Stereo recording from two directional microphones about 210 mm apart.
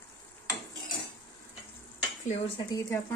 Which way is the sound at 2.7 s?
15° left (ahead or behind).